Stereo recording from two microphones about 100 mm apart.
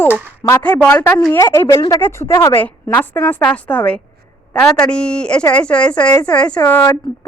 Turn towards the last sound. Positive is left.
turn(degrees=10)  # may be behind; listen again after turning